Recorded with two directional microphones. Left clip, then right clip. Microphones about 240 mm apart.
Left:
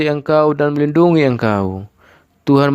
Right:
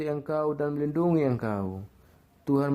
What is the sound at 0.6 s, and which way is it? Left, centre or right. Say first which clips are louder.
Speech: left 14 dB; left.